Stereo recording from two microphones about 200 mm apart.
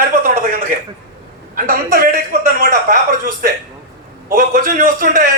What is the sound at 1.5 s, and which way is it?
A man's voice, 45° right (ahead or behind).